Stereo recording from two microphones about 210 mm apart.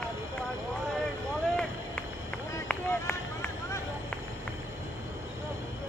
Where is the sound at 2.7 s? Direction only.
10° left (ahead or behind).